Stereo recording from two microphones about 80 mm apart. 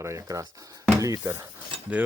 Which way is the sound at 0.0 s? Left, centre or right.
Right.